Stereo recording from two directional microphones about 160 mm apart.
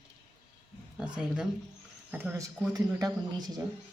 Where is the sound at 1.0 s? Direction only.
5° right (ahead or behind).